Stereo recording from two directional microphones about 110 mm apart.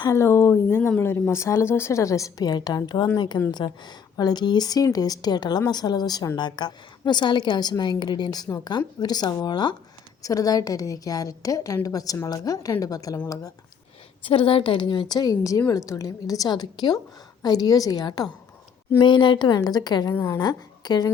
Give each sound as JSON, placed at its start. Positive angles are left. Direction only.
{"t": 0.0, "sound": "a woman's voice", "side_deg": 30}
{"t": 14.3, "sound": "a woman's voice", "side_deg": 55}
{"t": 15.1, "sound": "a woman's voice", "side_deg": 35}